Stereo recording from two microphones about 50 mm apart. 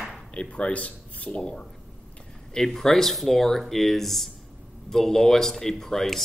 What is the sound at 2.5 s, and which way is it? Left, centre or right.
Speech, centre.